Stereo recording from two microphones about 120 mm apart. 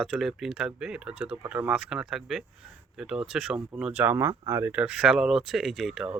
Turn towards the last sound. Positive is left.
turn(degrees=-5)  # may be behind; listen again after turning